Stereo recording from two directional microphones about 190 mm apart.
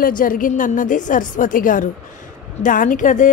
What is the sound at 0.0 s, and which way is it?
A woman's voice, 45° left (ahead or behind).